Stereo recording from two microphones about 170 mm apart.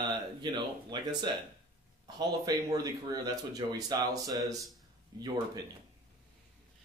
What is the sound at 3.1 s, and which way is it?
Speech, 20° right (ahead or behind).